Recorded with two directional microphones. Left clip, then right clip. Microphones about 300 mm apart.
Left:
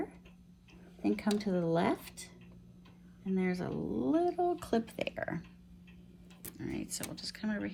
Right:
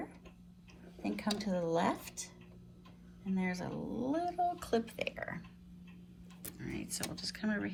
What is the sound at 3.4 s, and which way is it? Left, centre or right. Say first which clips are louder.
A woman's voice: left 4 dB; left.